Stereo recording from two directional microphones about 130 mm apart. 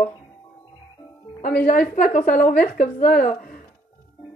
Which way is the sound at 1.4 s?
80° left.